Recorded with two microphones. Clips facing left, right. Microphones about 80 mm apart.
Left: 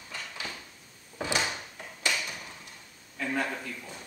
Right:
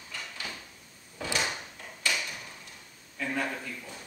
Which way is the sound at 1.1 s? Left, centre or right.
Left.